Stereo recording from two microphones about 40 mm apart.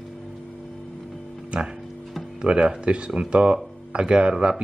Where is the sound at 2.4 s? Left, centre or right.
Right.